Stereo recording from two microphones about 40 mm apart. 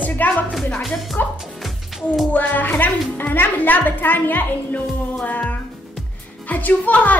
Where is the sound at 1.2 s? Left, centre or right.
Left.